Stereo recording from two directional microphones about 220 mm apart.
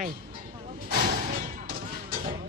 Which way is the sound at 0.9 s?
40° right (ahead or behind).